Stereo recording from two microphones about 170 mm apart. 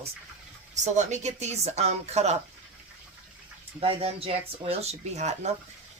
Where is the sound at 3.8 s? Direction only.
35° right (ahead or behind).